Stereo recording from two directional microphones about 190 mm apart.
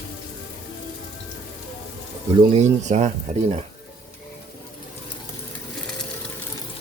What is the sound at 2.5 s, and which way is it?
Speech, 40° right (ahead or behind).